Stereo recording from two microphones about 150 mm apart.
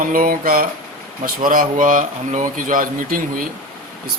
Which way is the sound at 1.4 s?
65° right (ahead or behind).